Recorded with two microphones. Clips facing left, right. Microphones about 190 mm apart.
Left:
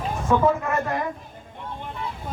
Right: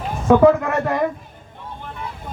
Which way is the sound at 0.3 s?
90° right.